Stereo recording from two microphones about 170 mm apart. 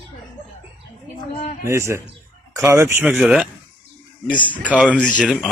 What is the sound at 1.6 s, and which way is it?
Speech, 15° right (ahead or behind).